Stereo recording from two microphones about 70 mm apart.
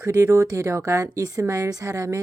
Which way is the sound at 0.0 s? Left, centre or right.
Right.